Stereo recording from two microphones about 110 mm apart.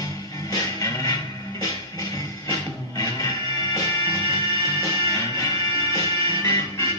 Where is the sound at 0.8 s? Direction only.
30° left (ahead or behind).